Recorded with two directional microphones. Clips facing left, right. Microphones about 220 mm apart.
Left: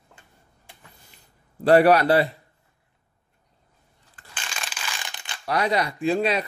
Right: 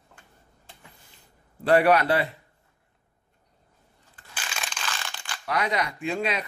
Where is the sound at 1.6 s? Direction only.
35° left (ahead or behind).